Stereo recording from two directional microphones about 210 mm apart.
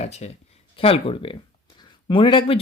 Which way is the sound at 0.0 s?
30° left (ahead or behind).